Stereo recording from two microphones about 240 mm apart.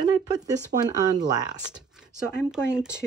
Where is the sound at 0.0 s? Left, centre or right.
Centre.